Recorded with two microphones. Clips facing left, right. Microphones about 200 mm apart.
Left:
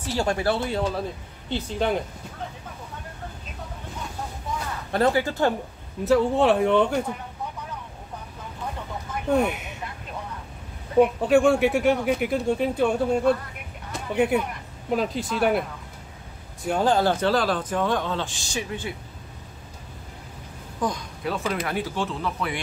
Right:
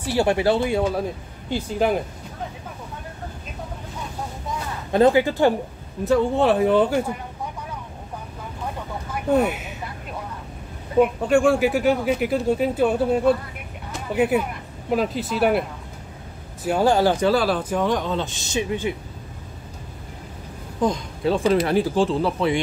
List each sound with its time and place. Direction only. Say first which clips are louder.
0.0 s speech: right 5 dB; 15° right (ahead or behind)
4.9 s speech: right 6 dB; 15° right (ahead or behind)
6.0 s speech: right 1 dB; centre (ahead or behind)
9.3 s speech: right 3 dB; 5° right (ahead or behind)
11.0 s speech: even; centre (ahead or behind)
16.6 s speech: right 3 dB; 10° right (ahead or behind)
20.8 s speech: right 6 dB; 25° right (ahead or behind)